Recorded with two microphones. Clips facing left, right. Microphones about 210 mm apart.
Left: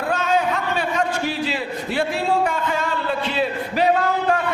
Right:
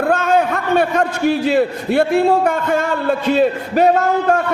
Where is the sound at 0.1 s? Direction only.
55° right (ahead or behind).